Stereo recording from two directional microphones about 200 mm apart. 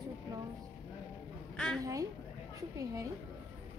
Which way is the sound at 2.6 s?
15° right (ahead or behind).